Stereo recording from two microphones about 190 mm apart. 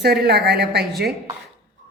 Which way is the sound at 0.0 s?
55° right (ahead or behind).